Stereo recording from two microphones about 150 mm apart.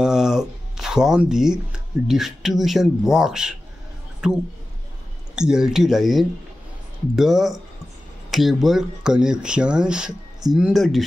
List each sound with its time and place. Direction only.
0.0 s speech: 5° right (ahead or behind)